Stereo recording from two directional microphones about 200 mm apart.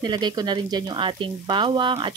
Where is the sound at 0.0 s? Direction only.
20° right (ahead or behind).